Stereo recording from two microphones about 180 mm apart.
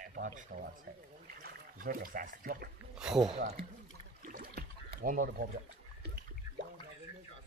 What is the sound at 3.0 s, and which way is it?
Speech, 5° right (ahead or behind).